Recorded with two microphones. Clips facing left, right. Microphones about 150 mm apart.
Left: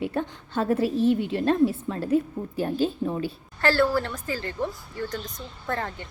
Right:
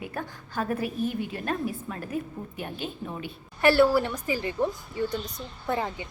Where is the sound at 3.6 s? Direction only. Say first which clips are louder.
Right 2 dB; 15° right (ahead or behind).